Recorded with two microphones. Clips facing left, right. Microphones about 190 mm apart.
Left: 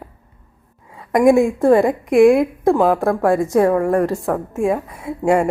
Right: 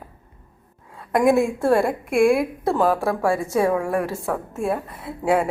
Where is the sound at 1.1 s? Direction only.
15° left (ahead or behind).